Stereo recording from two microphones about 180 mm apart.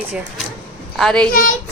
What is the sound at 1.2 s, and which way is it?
Speech, 55° left (ahead or behind).